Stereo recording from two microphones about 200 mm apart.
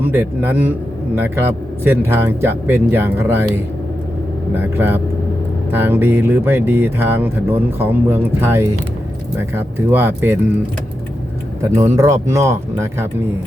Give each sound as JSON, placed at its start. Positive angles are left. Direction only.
{"t": 0.0, "sound": "a man's voice", "side_deg": -10}
{"t": 11.9, "sound": "a man's voice", "side_deg": -15}